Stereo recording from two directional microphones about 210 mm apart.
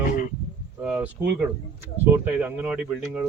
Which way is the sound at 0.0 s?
40° left (ahead or behind).